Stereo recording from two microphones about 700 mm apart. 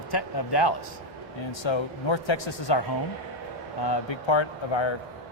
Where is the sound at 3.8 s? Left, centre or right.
Left.